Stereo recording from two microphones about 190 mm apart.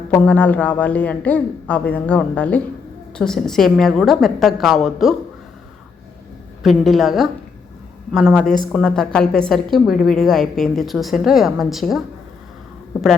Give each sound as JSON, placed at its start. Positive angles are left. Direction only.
{"t": 0.1, "sound": "a woman's voice", "side_deg": 10}
{"t": 6.6, "sound": "a woman's voice", "side_deg": 0}
{"t": 9.9, "sound": "a woman's voice", "side_deg": 50}
{"t": 10.2, "sound": "a woman's voice", "side_deg": 0}